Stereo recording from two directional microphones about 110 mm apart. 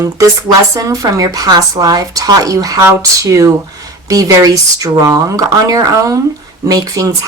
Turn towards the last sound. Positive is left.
turn(degrees=-30)  # may be behind; listen again after turning